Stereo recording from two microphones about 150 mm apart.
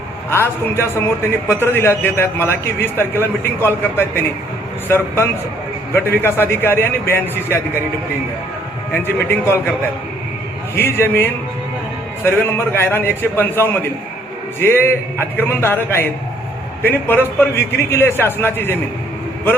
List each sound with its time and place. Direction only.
0.3 s a man's voice: 15° left (ahead or behind)
8.9 s a man's voice: 15° left (ahead or behind)
10.8 s a man's voice: 15° left (ahead or behind)
16.8 s a man's voice: 15° left (ahead or behind)